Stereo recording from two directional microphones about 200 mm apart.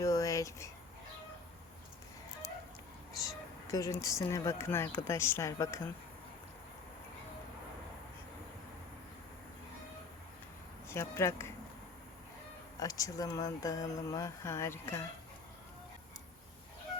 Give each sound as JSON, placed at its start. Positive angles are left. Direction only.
{"t": 0.0, "sound": "a sound", "side_deg": 15}
{"t": 3.7, "sound": "speech", "side_deg": 15}
{"t": 10.8, "sound": "speech", "side_deg": 15}
{"t": 12.8, "sound": "speech", "side_deg": 15}